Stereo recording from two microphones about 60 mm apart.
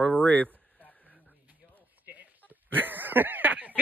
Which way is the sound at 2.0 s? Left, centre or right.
Right.